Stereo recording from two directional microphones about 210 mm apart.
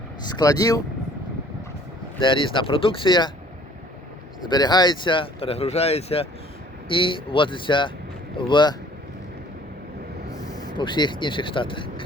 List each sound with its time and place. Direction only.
0.3 s speech: 20° left (ahead or behind)
2.2 s speech: 25° left (ahead or behind)
4.4 s speech: 20° left (ahead or behind)
10.3 s speech: 15° left (ahead or behind)